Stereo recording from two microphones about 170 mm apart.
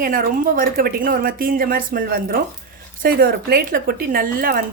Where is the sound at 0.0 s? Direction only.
55° right (ahead or behind).